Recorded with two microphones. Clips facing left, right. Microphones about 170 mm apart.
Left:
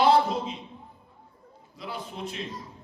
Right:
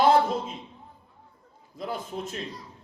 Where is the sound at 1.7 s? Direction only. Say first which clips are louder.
Right 4 dB; 45° right (ahead or behind).